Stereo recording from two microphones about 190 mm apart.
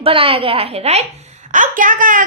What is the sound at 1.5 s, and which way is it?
Speech, 45° right (ahead or behind).